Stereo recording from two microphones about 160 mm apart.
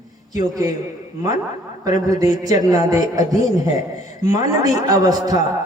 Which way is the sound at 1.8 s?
25° right (ahead or behind).